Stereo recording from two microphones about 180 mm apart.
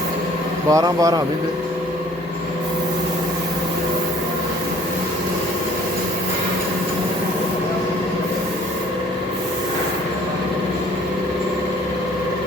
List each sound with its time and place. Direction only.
0.7 s speech: 20° right (ahead or behind)